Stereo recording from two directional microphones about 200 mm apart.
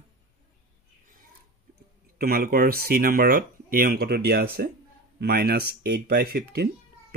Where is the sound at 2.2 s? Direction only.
50° right (ahead or behind).